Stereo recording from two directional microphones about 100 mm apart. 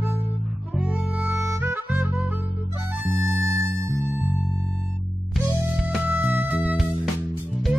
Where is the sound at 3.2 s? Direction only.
30° right (ahead or behind).